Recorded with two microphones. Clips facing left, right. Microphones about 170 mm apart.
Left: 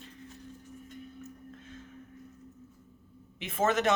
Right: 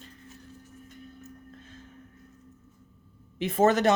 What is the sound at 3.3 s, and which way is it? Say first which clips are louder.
Speech: right 6 dB; 35° right (ahead or behind).